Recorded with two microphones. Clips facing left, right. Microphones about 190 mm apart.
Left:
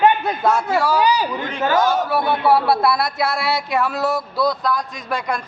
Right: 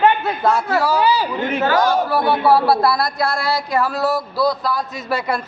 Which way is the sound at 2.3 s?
Centre (ahead or behind).